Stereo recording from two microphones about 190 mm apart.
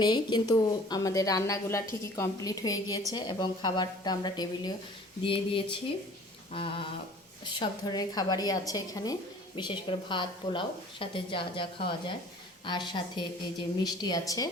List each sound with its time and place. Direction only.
0.0 s a woman's voice: 20° left (ahead or behind)